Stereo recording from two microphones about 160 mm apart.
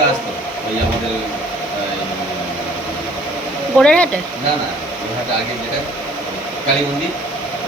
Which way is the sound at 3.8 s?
5° left (ahead or behind).